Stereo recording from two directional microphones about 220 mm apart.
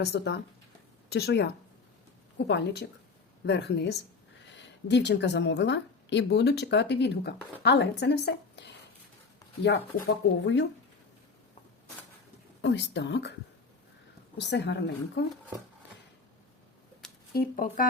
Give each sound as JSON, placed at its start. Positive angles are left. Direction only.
{"t": 0.0, "sound": "a woman's voice", "side_deg": 50}
{"t": 10.4, "sound": "speech", "side_deg": 55}
{"t": 12.6, "sound": "a woman's voice", "side_deg": 50}
{"t": 14.3, "sound": "a woman's voice", "side_deg": 50}
{"t": 17.3, "sound": "speech", "side_deg": 40}